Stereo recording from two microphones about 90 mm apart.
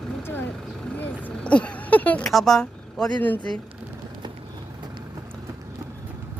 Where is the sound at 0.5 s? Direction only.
Centre (ahead or behind).